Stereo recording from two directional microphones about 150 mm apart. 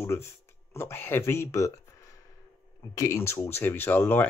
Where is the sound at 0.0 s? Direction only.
15° left (ahead or behind).